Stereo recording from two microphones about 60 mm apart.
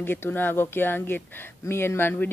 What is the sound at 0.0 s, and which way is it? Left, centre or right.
Speech, left.